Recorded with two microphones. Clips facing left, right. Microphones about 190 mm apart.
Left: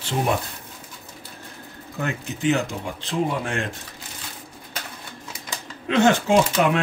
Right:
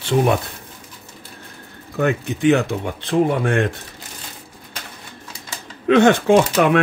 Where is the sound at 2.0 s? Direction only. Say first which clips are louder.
Right 7 dB; 60° right (ahead or behind).